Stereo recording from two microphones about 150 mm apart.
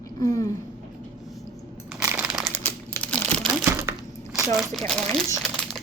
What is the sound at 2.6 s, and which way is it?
Crumpling, 10° left (ahead or behind).